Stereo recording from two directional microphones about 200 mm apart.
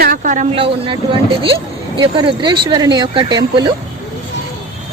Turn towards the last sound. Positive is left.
turn(degrees=-20)  # may be behind; listen again after turning